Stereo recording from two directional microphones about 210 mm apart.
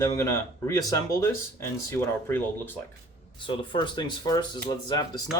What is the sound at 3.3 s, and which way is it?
Speech, 25° left (ahead or behind).